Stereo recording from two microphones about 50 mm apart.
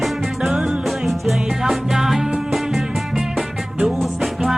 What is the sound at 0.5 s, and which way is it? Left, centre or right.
Music, centre.